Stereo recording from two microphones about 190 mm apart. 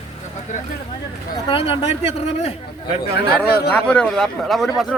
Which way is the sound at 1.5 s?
30° left (ahead or behind).